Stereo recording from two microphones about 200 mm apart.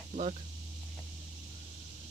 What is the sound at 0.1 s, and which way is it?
Speech, 35° right (ahead or behind).